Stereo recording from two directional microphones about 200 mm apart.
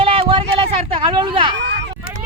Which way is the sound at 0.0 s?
25° right (ahead or behind).